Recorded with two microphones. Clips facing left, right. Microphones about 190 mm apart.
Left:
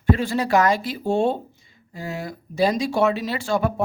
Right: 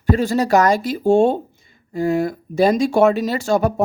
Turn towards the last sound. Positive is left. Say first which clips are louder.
# right 5 dB
turn(degrees=-45)  # may be behind; listen again after turning